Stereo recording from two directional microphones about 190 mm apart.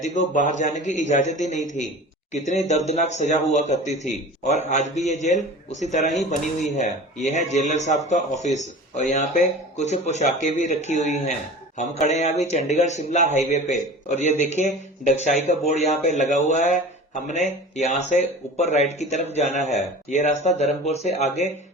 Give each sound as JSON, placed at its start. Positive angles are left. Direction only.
{"t": 0.0, "sound": "a man's voice", "side_deg": 40}